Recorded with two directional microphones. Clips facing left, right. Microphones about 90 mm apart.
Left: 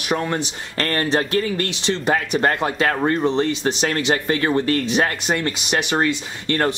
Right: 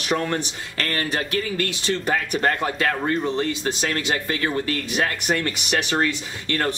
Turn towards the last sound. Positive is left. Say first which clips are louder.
# left 4 dB
turn(degrees=20)  # may be behind; listen again after turning